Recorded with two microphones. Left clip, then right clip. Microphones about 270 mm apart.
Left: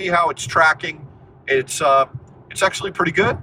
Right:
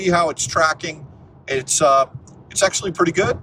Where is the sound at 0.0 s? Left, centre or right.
Centre.